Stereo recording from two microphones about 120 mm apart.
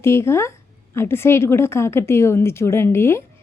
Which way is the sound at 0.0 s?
20° left (ahead or behind).